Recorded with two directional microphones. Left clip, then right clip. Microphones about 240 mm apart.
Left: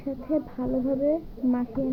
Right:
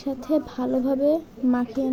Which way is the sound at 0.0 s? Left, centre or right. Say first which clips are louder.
Right 4 dB; right.